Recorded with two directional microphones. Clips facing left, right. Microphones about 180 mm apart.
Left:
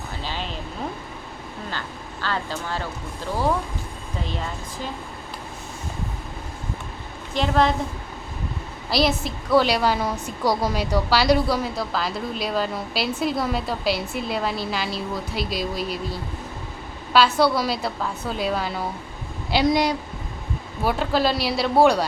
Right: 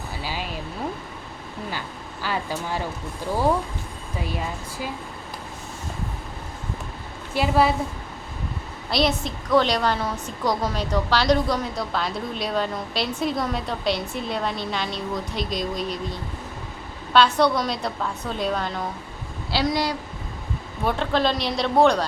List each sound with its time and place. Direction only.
0.2 s a sound: 10° right (ahead or behind)
2.2 s speech: 10° right (ahead or behind)
4.2 s speech: 10° right (ahead or behind)
7.3 s speech: 10° right (ahead or behind)
8.9 s a woman's voice: 5° left (ahead or behind)
19.5 s speech: 20° left (ahead or behind)
20.8 s a woman's voice: 5° left (ahead or behind)